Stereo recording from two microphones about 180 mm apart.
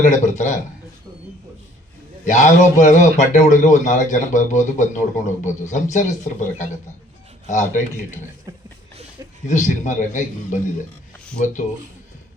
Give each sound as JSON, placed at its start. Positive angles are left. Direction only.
{"t": 0.0, "sound": "a man's voice", "side_deg": 45}
{"t": 2.2, "sound": "a man's voice", "side_deg": 45}
{"t": 7.4, "sound": "a man's voice", "side_deg": 45}
{"t": 8.5, "sound": "a sound", "side_deg": -20}
{"t": 9.5, "sound": "a man's voice", "side_deg": 45}